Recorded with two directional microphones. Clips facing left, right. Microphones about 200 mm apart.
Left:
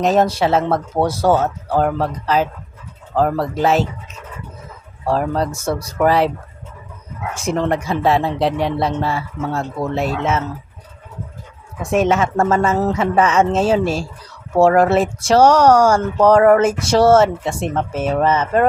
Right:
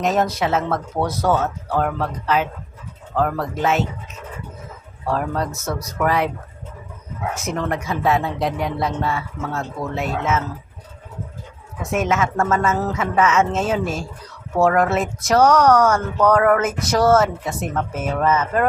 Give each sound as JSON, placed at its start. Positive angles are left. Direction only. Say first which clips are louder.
{"t": 0.0, "sound": "a man's voice", "louder": "left 4 dB", "side_deg": 30}
{"t": 5.0, "sound": "a man's voice", "louder": "left 4 dB", "side_deg": 30}
{"t": 7.3, "sound": "a man's voice", "louder": "left 7 dB", "side_deg": 30}
{"t": 11.8, "sound": "a man's voice", "louder": "left 4 dB", "side_deg": 30}